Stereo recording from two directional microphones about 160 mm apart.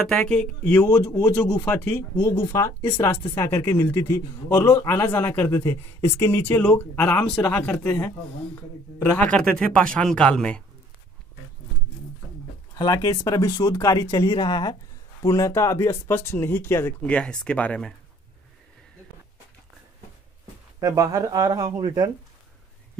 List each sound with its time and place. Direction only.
0.0 s speech: 5° left (ahead or behind)
1.1 s speech: 20° left (ahead or behind)
12.7 s speech: 25° left (ahead or behind); by 17.9 s 5° left (ahead or behind)
20.8 s speech: 20° right (ahead or behind)